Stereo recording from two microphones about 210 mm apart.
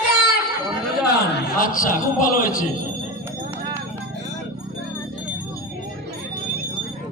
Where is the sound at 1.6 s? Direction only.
40° left (ahead or behind).